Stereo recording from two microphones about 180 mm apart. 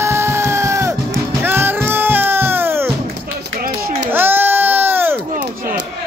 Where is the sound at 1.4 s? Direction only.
10° right (ahead or behind).